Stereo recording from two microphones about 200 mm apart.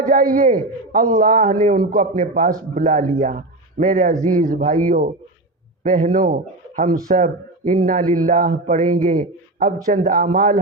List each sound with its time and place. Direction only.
0.0 s a man's voice: 45° right (ahead or behind)